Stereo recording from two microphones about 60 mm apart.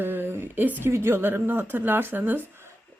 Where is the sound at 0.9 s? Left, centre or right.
Right.